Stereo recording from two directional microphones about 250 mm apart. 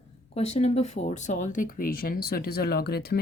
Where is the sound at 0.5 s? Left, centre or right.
Left.